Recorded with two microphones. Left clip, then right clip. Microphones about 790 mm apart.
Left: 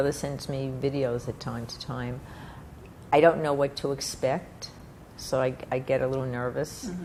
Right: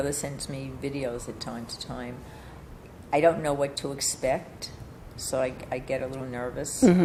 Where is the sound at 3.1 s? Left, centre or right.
Left.